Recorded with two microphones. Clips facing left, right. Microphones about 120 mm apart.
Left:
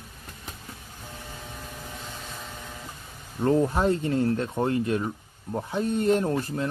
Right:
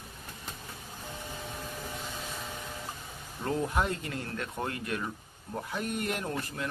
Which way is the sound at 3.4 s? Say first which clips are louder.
Left 8 dB; 35° left (ahead or behind).